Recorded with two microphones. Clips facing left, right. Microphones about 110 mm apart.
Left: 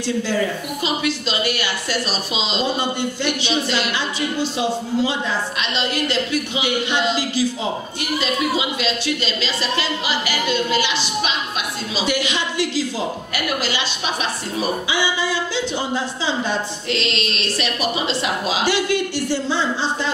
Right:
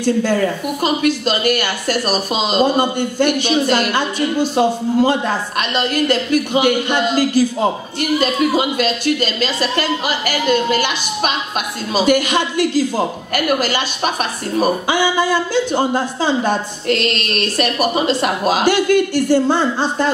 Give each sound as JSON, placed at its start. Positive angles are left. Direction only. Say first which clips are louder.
{"t": 0.0, "sound": "speech", "louder": "right 5 dB", "side_deg": -50}